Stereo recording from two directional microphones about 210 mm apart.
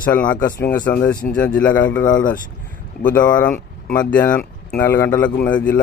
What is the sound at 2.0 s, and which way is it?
Speech, 40° left (ahead or behind).